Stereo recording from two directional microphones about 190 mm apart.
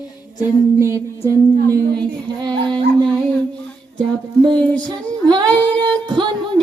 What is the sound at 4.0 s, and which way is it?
Child singing, 25° right (ahead or behind).